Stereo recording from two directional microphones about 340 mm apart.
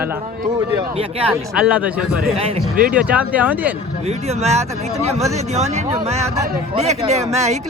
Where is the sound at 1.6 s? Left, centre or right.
Centre.